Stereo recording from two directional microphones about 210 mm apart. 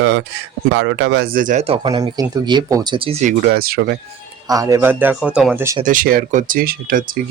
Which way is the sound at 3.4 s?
45° right (ahead or behind).